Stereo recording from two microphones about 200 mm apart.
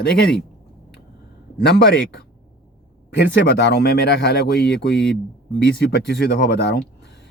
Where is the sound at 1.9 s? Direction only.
65° left (ahead or behind).